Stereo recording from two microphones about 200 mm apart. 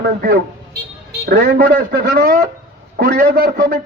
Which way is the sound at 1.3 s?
50° right (ahead or behind).